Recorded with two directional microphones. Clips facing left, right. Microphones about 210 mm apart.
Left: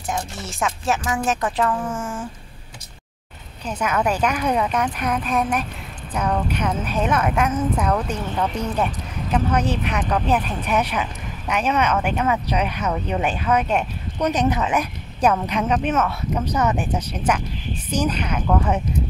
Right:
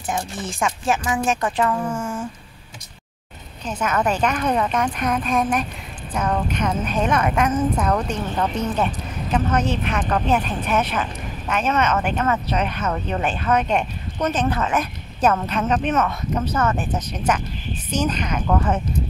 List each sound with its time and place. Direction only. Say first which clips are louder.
0.5 s speech: right 1 dB; centre (ahead or behind)
3.8 s a woman's voice: even; 10° left (ahead or behind)